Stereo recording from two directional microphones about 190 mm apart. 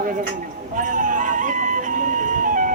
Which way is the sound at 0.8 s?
40° right (ahead or behind).